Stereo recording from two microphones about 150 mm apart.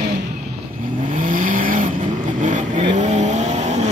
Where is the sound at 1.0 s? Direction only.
60° right (ahead or behind).